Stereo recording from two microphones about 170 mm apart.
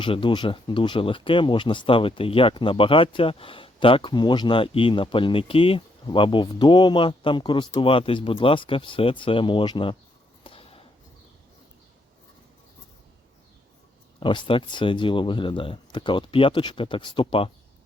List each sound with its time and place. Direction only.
0.0 s speech: 30° left (ahead or behind)
10.4 s a sound: 35° left (ahead or behind)
14.2 s speech: 30° left (ahead or behind)